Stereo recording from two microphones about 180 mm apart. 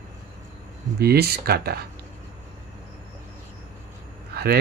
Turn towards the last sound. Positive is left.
turn(degrees=-60)  # may be behind; listen again after turning